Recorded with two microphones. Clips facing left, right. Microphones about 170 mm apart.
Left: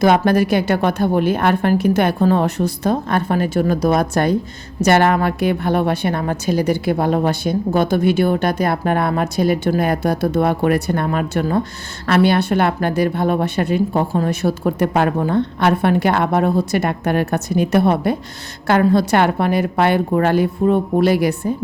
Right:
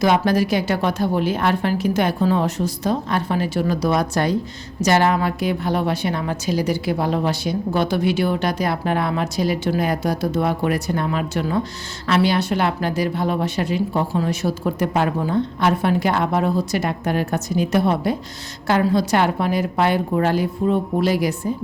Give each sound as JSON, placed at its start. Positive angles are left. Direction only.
{"t": 0.0, "sound": "a woman's voice", "side_deg": 55}